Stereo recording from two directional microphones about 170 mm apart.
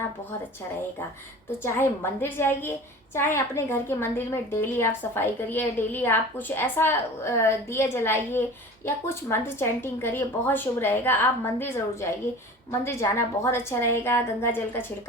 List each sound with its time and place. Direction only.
1.6 s a woman's voice: 15° left (ahead or behind)